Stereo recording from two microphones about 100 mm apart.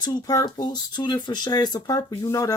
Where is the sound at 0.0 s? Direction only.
40° left (ahead or behind).